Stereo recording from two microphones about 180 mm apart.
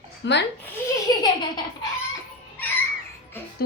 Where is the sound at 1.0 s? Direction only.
25° left (ahead or behind).